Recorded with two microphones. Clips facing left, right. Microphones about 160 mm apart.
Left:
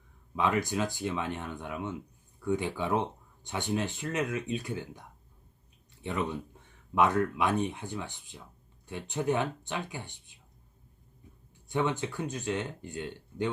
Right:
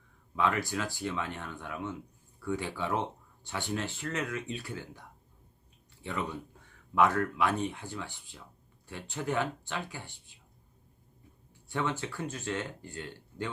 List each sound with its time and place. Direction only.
0.3 s speech: 20° left (ahead or behind)
11.7 s speech: 20° left (ahead or behind)